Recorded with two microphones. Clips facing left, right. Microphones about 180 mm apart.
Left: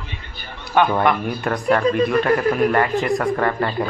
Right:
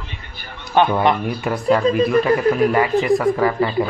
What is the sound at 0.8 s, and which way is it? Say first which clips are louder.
Speech: right 1 dB; 25° right (ahead or behind).